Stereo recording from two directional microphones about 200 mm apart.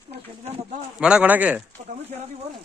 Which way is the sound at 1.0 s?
5° right (ahead or behind).